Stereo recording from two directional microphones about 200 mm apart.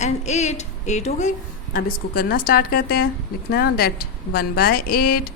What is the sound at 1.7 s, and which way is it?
A woman's voice, 50° left (ahead or behind).